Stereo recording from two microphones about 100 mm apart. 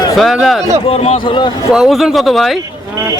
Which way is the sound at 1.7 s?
5° right (ahead or behind).